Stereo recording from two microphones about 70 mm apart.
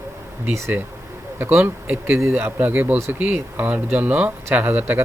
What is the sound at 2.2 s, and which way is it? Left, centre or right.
Speech, right.